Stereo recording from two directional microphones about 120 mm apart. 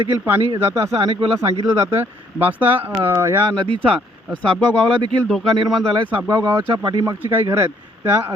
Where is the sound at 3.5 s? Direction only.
45° right (ahead or behind).